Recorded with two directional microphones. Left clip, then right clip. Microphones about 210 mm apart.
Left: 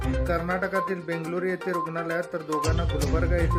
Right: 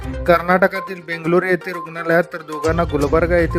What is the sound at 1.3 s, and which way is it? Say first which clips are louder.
Speech: right 14 dB; 50° right (ahead or behind).